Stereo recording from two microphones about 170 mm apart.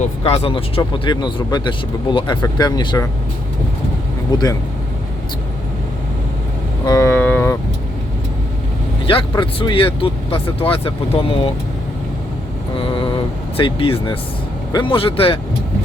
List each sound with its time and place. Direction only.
0.0 s speech: 35° left (ahead or behind)
4.3 s speech: 20° left (ahead or behind)
6.8 s speech: 20° left (ahead or behind)
9.0 s speech: 30° left (ahead or behind)
12.7 s vehicle: 30° left (ahead or behind)
13.6 s speech: 30° left (ahead or behind)